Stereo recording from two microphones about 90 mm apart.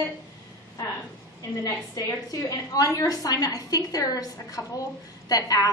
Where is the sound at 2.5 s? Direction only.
40° left (ahead or behind).